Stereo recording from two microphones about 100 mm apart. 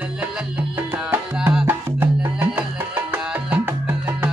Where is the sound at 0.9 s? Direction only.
15° right (ahead or behind).